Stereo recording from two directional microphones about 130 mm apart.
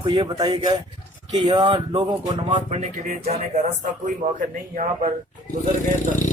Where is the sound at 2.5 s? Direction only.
65° right (ahead or behind).